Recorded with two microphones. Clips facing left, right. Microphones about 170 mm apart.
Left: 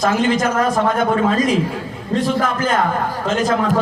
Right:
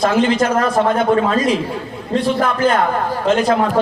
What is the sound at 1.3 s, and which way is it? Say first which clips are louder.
A man's voice: even; 45° left (ahead or behind).